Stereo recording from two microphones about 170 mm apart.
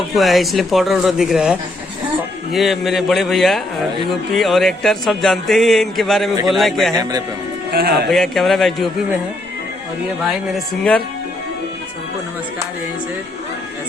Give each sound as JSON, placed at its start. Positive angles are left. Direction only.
{"t": 0.2, "sound": "speech", "side_deg": 0}
{"t": 7.7, "sound": "speech", "side_deg": -65}
{"t": 8.1, "sound": "speech", "side_deg": 0}
{"t": 10.2, "sound": "speech", "side_deg": 5}